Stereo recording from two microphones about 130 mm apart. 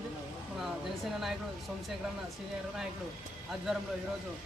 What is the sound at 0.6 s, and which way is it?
Speech, centre (ahead or behind).